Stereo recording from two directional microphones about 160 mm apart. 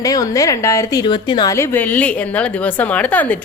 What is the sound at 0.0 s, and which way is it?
A woman's voice, 20° left (ahead or behind).